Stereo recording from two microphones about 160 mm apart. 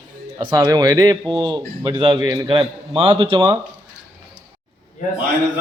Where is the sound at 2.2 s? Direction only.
20° right (ahead or behind).